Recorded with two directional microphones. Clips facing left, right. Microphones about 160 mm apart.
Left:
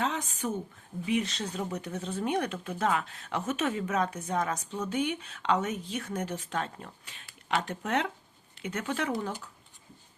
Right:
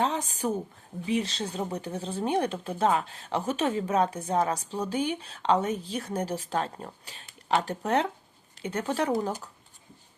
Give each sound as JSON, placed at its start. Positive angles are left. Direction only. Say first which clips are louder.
{"t": 0.0, "sound": "speech", "louder": "right 4 dB", "side_deg": -35}